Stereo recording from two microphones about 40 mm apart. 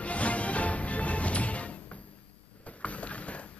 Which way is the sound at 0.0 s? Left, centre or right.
Left.